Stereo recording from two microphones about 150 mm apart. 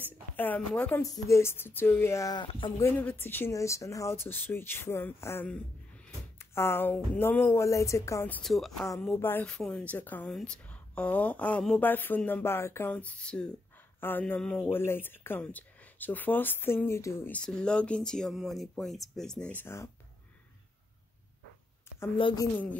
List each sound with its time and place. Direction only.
0.4 s a woman's voice: 10° left (ahead or behind)
1.0 s speech: 20° left (ahead or behind)
2.8 s a woman's voice: 15° left (ahead or behind)
8.4 s a woman's voice: centre (ahead or behind); by 19.9 s 15° left (ahead or behind)
22.1 s a woman's voice: 35° left (ahead or behind)